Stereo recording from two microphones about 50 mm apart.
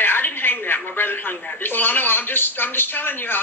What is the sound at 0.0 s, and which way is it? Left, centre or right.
A woman's voice, left.